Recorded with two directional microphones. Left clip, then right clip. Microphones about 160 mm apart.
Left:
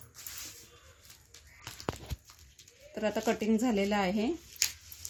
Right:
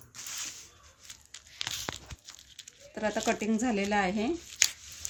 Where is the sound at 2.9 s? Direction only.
35° left (ahead or behind).